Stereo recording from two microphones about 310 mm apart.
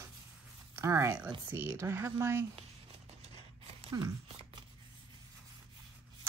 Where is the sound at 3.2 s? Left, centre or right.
Centre.